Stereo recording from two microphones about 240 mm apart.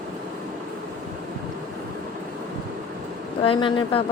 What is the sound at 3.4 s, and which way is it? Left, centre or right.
Speech, left.